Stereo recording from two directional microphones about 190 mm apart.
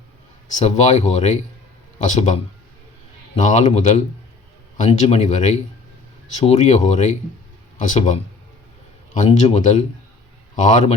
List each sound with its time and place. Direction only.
0.4 s speech: 35° left (ahead or behind)